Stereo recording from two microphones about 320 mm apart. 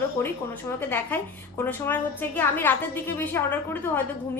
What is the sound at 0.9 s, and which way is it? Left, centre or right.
A woman's voice, centre.